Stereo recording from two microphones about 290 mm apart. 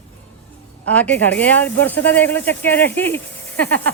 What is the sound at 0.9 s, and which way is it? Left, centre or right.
Speech, centre.